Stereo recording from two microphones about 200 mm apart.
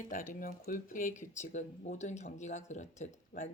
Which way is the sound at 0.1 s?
40° left (ahead or behind).